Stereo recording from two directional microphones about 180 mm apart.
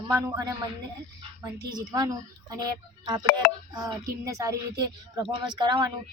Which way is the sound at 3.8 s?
20° right (ahead or behind).